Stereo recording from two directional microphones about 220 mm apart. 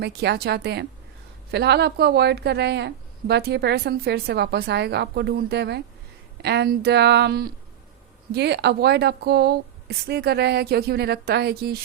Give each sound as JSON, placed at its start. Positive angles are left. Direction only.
{"t": 0.0, "sound": "a woman's voice", "side_deg": -50}